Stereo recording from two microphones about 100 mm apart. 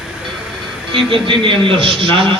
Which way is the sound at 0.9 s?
60° right (ahead or behind).